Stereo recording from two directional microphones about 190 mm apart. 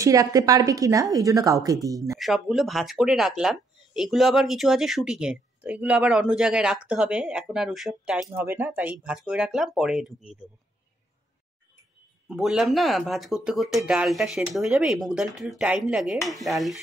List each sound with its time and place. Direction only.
0.0 s a woman's voice: 15° right (ahead or behind)
2.1 s speech: centre (ahead or behind)
12.3 s speech: centre (ahead or behind)